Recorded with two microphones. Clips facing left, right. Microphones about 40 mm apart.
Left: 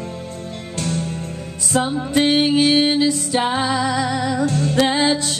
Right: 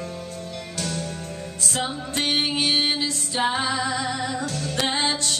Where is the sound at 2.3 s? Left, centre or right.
Centre.